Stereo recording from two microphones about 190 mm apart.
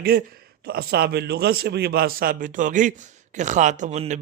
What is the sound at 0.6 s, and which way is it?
A man's voice, 55° right (ahead or behind).